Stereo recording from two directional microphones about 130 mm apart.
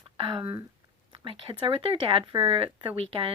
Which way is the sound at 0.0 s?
40° right (ahead or behind).